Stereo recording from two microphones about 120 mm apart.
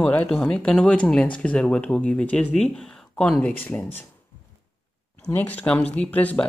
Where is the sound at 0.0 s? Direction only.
15° left (ahead or behind).